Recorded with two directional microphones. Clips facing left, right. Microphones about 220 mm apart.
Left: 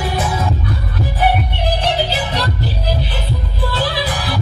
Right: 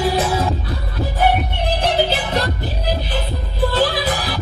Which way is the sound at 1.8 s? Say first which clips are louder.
Right 3 dB; 50° right (ahead or behind).